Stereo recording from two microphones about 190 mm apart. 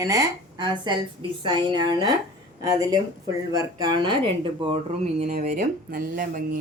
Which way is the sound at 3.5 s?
20° right (ahead or behind).